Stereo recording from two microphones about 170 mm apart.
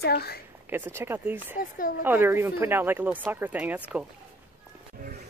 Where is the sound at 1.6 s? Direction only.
55° left (ahead or behind).